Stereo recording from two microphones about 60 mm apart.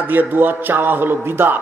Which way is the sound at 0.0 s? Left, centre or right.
Right.